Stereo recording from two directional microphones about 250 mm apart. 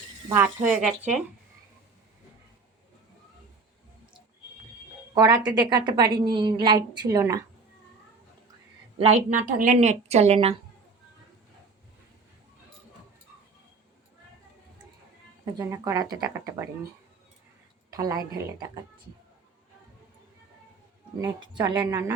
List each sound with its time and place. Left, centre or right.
0.3 s speech: centre
5.1 s a woman's voice: centre
9.0 s a woman's voice: right
15.5 s a woman's voice: centre
17.9 s a woman's voice: centre
21.2 s a woman's voice: centre